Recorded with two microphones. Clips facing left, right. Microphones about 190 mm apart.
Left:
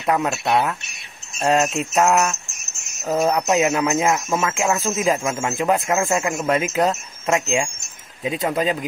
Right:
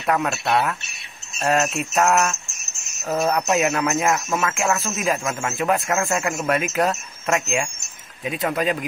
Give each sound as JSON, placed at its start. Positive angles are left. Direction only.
{"t": 0.0, "sound": "a man's voice", "side_deg": 15}